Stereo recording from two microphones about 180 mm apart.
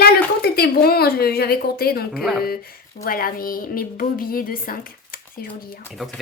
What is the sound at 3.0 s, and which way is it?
A woman's voice, 55° left (ahead or behind).